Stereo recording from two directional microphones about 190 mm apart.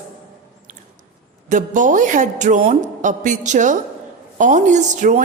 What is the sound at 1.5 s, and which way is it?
A woman's voice, 40° right (ahead or behind).